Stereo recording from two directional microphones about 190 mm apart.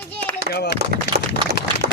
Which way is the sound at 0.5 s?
60° left (ahead or behind).